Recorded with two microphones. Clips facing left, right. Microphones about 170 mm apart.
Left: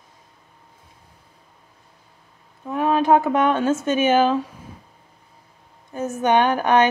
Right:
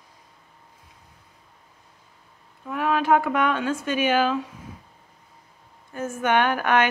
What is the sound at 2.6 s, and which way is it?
Speech, 25° left (ahead or behind).